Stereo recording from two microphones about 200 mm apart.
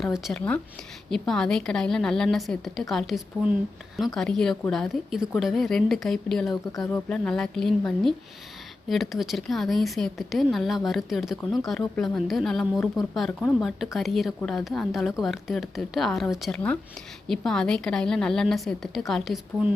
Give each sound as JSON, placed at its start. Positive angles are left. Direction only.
{"t": 0.0, "sound": "speech", "side_deg": 0}